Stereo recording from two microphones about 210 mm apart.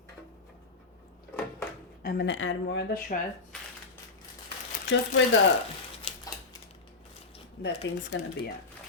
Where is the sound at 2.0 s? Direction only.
50° left (ahead or behind).